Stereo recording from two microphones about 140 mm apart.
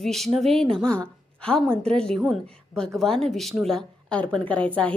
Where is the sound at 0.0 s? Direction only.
Centre (ahead or behind).